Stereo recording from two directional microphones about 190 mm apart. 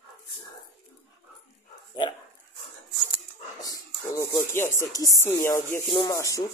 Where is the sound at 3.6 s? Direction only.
15° left (ahead or behind).